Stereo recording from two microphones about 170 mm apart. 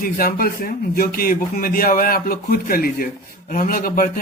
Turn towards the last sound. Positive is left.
turn(degrees=55)  # may be behind; listen again after turning